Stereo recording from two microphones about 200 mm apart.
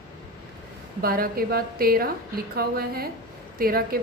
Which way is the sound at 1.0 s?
45° right (ahead or behind).